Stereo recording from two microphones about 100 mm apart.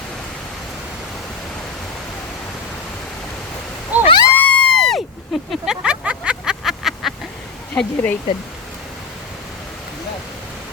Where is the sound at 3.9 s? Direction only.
15° right (ahead or behind).